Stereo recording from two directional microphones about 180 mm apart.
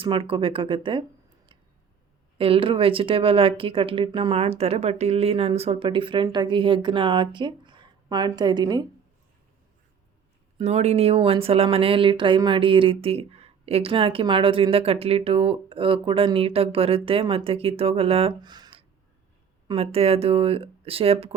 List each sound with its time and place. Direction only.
0.0 s speech: 30° right (ahead or behind)
2.4 s speech: 30° right (ahead or behind)
10.6 s speech: 35° right (ahead or behind)